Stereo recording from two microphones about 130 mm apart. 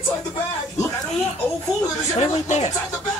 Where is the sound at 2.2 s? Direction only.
60° left (ahead or behind).